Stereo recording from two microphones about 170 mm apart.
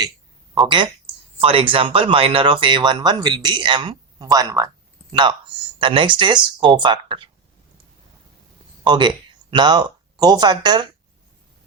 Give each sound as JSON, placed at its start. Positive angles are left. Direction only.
{"t": 0.5, "sound": "speech", "side_deg": -30}
{"t": 8.8, "sound": "speech", "side_deg": -25}